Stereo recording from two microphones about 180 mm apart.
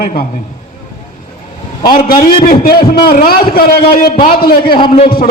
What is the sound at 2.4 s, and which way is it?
A man's voice, 55° left (ahead or behind).